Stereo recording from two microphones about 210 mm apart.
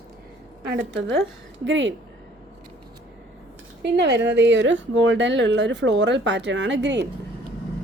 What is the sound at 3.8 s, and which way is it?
Speech, 55° right (ahead or behind).